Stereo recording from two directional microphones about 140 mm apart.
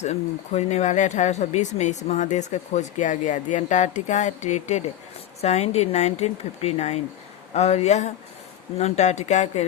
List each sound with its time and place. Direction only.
0.0 s speech: 55° left (ahead or behind)